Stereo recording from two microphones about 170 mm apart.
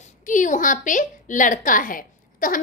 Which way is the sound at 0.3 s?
50° left (ahead or behind).